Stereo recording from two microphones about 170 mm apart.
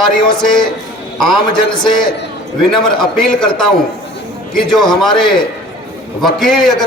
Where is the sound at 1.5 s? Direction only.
25° left (ahead or behind).